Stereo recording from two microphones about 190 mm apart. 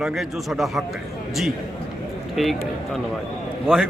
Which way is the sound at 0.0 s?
Centre (ahead or behind).